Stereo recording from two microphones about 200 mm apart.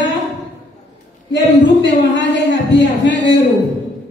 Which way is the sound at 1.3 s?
60° left (ahead or behind).